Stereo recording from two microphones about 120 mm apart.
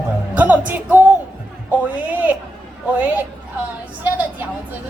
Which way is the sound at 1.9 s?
10° right (ahead or behind).